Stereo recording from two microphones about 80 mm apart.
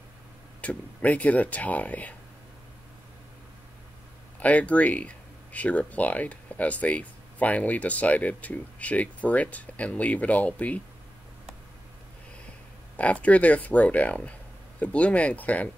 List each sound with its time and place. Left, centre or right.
0.6 s speech: centre
4.4 s speech: centre
12.9 s speech: centre